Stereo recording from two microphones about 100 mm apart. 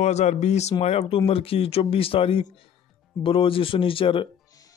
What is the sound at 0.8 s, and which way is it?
A man's voice, 80° left.